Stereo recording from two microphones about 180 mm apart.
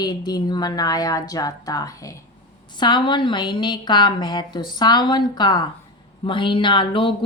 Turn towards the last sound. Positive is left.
turn(degrees=30)  # may be behind; listen again after turning